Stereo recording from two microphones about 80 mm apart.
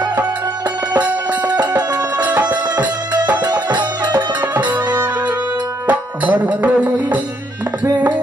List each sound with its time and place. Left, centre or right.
0.9 s music: centre
1.5 s music: right
2.0 s music: centre
3.3 s music: right
5.9 s music: right